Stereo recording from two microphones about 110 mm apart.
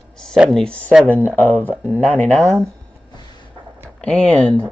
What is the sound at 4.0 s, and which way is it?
Speech, 10° left (ahead or behind).